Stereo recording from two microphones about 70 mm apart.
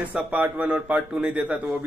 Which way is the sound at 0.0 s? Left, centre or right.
Right.